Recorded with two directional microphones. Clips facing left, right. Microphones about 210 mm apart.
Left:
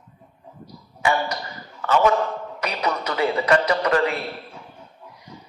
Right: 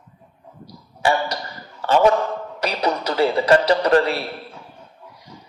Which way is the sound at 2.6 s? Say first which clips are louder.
Right 3 dB; 30° right (ahead or behind).